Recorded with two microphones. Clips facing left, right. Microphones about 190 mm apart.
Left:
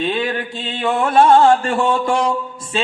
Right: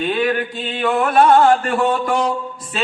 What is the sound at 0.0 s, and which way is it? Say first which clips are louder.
Music: right 2 dB; 25° left (ahead or behind).